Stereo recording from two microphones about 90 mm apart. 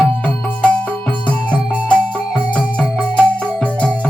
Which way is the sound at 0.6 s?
15° left (ahead or behind).